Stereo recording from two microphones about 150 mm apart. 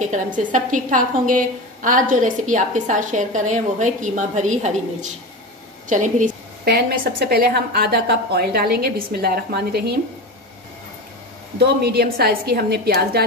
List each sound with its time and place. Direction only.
0.0 s a woman's voice: 55° right (ahead or behind); by 9.9 s 90° right
11.6 s a woman's voice: 90° right